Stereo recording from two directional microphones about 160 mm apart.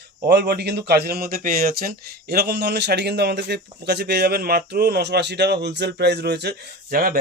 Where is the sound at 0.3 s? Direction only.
90° right.